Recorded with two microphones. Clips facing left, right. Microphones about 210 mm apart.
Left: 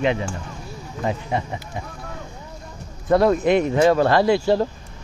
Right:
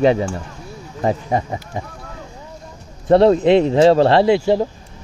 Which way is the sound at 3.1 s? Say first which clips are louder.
Right 5 dB; 30° right (ahead or behind).